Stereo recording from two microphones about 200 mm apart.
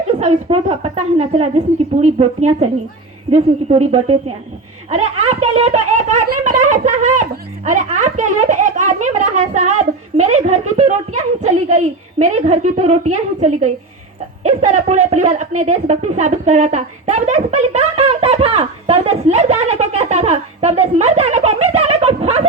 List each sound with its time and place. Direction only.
0.1 s a woman's voice: 30° right (ahead or behind)
12.2 s a woman's voice: 35° right (ahead or behind)